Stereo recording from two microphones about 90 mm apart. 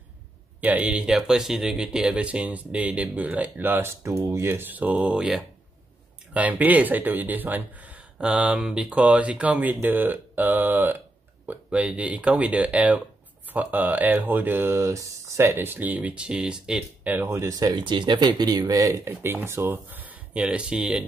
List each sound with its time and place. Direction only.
0.6 s speech: 15° right (ahead or behind)
4.0 s speech: 35° right (ahead or behind); by 16.8 s 10° right (ahead or behind)
17.0 s speech: 20° right (ahead or behind)
17.3 s speech: 35° right (ahead or behind)
17.7 s speech: 60° right (ahead or behind); by 19.1 s 40° right (ahead or behind)
19.2 s speech: 25° right (ahead or behind); by 21.0 s 10° right (ahead or behind)